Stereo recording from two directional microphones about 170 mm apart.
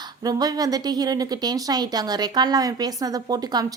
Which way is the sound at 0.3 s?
20° right (ahead or behind).